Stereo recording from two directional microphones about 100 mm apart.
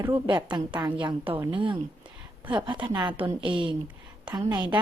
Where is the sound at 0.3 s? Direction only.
50° right (ahead or behind).